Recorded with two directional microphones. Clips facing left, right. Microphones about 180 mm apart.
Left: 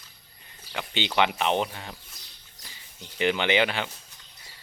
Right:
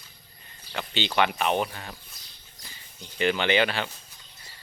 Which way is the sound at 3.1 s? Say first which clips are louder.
Even; 15° left (ahead or behind).